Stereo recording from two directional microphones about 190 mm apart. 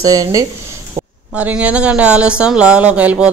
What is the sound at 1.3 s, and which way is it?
A woman's voice, 5° right (ahead or behind).